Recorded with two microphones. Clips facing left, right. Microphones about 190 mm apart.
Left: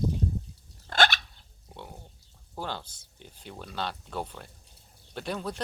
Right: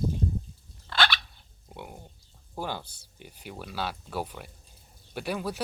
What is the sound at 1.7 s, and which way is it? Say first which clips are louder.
Pig: right 2 dB; 10° right (ahead or behind).